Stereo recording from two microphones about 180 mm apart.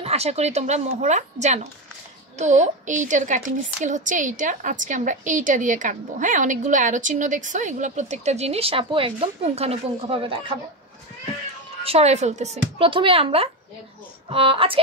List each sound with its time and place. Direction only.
0.0 s a woman's voice: 35° right (ahead or behind)
11.8 s speech: 35° right (ahead or behind)